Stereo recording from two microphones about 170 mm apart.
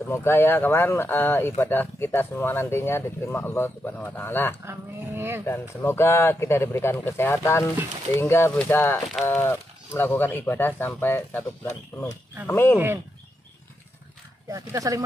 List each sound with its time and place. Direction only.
0.0 s speech: 15° left (ahead or behind)
4.6 s speech: 15° right (ahead or behind)
5.4 s speech: 15° left (ahead or behind)
12.4 s speech: 15° left (ahead or behind)
12.7 s speech: 10° right (ahead or behind)
14.5 s speech: 20° right (ahead or behind)